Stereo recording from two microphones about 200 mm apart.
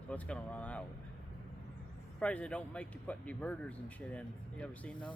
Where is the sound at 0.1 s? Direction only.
5° left (ahead or behind).